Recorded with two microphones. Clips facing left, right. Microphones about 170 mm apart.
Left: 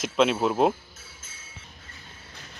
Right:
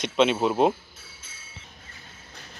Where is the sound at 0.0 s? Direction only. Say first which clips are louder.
Right 1 dB; centre (ahead or behind).